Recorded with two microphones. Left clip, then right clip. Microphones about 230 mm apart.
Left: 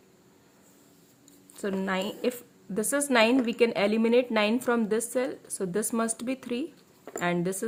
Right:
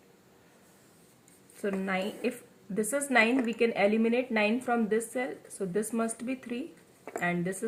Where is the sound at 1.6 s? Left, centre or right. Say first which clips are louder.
Left 2 dB; left.